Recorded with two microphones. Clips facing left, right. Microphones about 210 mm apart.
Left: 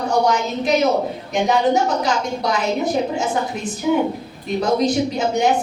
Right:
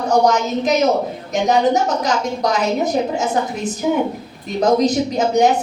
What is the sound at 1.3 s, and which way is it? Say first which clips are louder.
Speech: right 2 dB; 40° right (ahead or behind).